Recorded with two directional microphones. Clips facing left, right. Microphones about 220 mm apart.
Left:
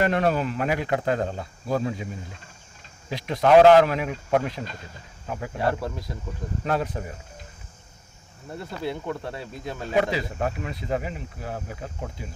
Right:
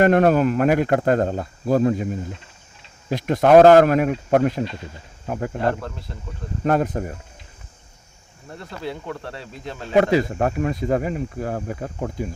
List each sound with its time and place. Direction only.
0.0 s speech: 50° right (ahead or behind)
3.1 s speech: 50° right (ahead or behind)
5.5 s speech: 10° left (ahead or behind)
6.7 s speech: 50° right (ahead or behind)
8.5 s speech: 10° left (ahead or behind)
9.9 s speech: 50° right (ahead or behind)